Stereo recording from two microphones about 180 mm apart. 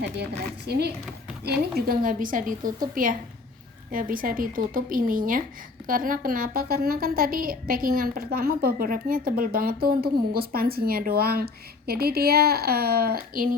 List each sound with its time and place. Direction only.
0.7 s a woman's voice: 65° right (ahead or behind)